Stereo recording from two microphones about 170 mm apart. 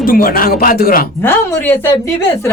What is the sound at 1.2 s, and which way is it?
Speech, 15° left (ahead or behind).